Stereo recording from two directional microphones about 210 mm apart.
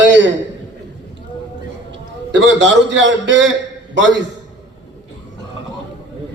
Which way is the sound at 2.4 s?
60° right (ahead or behind).